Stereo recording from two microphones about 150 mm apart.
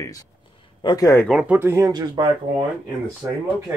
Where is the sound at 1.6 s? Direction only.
20° right (ahead or behind).